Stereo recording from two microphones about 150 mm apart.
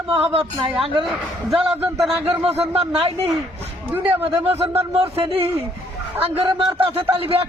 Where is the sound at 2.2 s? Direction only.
40° right (ahead or behind).